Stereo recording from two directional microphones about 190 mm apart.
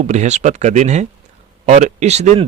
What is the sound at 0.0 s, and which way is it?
Speech, 35° right (ahead or behind).